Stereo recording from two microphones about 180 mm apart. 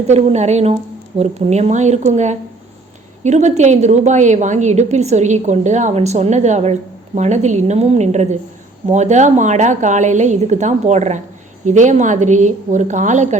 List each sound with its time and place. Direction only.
0.1 s a woman's voice: 40° right (ahead or behind)